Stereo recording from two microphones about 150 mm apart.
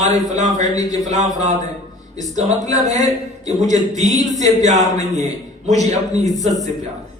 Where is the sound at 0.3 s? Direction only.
50° right (ahead or behind).